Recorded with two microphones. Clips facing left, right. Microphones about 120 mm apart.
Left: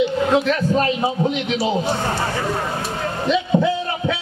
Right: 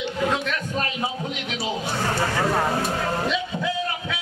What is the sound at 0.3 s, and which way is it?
Speech, 30° left (ahead or behind).